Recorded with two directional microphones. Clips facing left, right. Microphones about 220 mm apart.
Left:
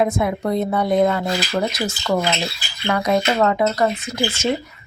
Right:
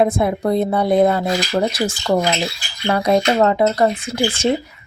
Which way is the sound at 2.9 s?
30° right (ahead or behind).